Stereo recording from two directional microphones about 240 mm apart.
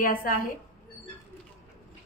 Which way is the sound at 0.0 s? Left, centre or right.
Left.